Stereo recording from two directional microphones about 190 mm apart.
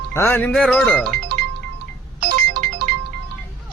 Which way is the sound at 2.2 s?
55° right (ahead or behind).